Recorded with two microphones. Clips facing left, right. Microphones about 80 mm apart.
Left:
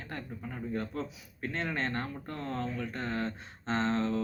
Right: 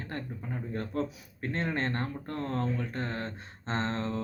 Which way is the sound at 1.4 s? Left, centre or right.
Right.